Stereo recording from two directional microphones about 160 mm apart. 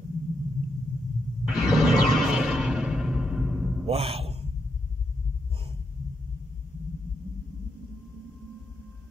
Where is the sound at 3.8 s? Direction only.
40° right (ahead or behind).